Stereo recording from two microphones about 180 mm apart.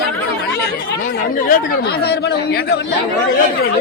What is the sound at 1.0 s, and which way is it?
Speech, 55° left (ahead or behind).